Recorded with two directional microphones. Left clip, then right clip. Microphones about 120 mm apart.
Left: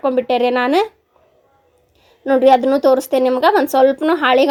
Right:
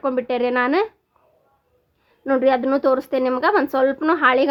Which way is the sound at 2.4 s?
20° left (ahead or behind).